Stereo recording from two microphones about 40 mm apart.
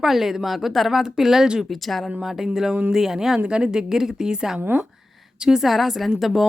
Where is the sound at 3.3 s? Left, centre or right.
Right.